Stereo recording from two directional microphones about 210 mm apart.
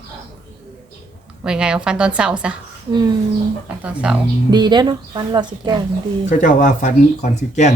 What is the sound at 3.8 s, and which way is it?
Speech, 5° right (ahead or behind).